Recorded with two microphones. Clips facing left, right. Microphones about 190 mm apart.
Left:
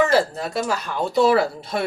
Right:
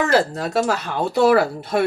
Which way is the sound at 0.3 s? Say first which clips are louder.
Right 4 dB; 75° right (ahead or behind).